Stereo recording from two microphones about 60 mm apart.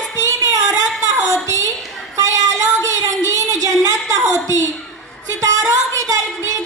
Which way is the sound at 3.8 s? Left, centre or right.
Right.